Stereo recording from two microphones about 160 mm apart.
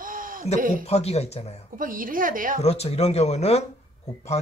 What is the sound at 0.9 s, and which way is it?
Speech, 40° left (ahead or behind).